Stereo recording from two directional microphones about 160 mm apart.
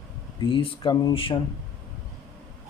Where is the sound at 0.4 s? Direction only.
35° left (ahead or behind).